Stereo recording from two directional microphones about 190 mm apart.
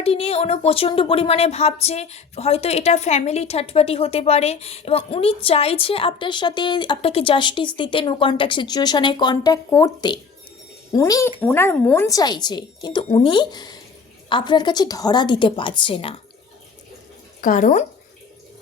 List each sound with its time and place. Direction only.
0.0 s a woman's voice: 30° left (ahead or behind)
17.4 s speech: 45° left (ahead or behind)